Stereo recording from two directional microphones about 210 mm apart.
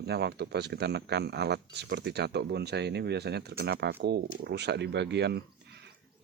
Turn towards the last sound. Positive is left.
turn(degrees=-55)  # may be behind; listen again after turning